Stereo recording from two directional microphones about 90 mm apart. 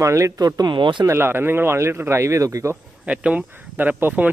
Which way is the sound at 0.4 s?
45° right (ahead or behind).